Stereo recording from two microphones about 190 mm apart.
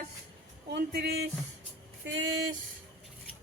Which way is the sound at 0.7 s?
55° right (ahead or behind).